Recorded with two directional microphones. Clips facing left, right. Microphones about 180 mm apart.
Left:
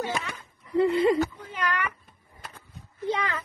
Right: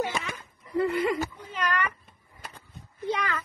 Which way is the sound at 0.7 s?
25° left (ahead or behind).